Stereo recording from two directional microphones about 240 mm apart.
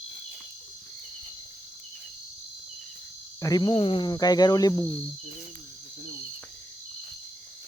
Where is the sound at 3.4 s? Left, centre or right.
Centre.